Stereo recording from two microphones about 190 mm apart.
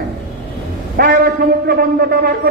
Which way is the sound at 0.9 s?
50° right (ahead or behind).